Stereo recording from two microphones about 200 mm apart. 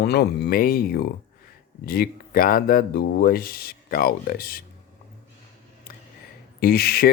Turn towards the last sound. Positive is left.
turn(degrees=50)  # may be behind; listen again after turning